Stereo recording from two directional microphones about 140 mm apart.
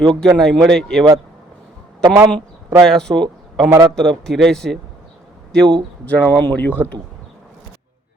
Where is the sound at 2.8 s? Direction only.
5° left (ahead or behind).